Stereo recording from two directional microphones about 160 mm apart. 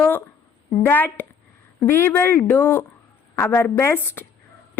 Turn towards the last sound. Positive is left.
turn(degrees=15)  # may be behind; listen again after turning